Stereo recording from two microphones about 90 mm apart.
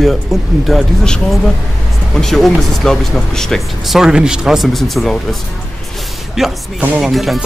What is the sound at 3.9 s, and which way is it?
Music, 5° right (ahead or behind).